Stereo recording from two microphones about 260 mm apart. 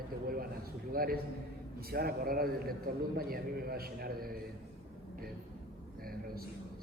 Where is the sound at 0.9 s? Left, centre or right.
Right.